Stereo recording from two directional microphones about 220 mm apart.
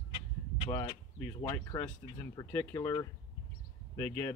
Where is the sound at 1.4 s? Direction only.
15° left (ahead or behind).